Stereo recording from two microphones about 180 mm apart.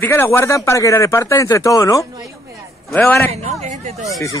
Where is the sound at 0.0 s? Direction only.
10° left (ahead or behind).